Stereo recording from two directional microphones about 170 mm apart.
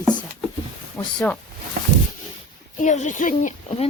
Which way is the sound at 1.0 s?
10° left (ahead or behind).